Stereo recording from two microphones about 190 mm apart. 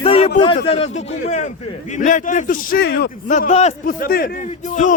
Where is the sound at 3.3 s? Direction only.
40° left (ahead or behind).